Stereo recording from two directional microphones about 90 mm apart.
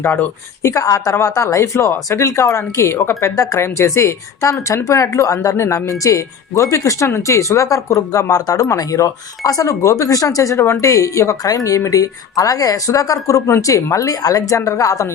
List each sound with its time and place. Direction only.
0.0 s speech: 25° left (ahead or behind)
0.7 s a woman's voice: 40° left (ahead or behind)